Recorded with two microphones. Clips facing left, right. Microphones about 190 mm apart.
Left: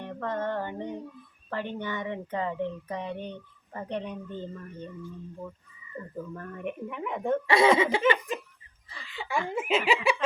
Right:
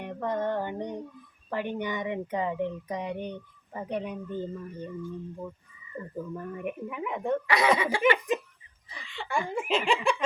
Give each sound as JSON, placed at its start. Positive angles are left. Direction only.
{"t": 0.0, "sound": "a sound", "side_deg": -15}
{"t": 1.5, "sound": "speech", "side_deg": -15}
{"t": 6.1, "sound": "speech", "side_deg": -10}
{"t": 7.4, "sound": "speech", "side_deg": 25}
{"t": 9.1, "sound": "speech", "side_deg": 5}